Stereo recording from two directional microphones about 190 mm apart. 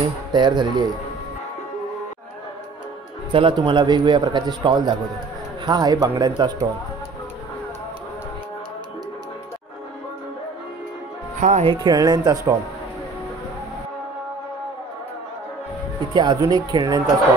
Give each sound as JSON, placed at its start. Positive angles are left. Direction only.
{"t": 0.3, "sound": "a man's voice", "side_deg": -25}
{"t": 3.3, "sound": "a man's voice", "side_deg": -25}
{"t": 11.3, "sound": "speech", "side_deg": -40}
{"t": 11.8, "sound": "a man's voice", "side_deg": -20}
{"t": 16.1, "sound": "a man's voice", "side_deg": -20}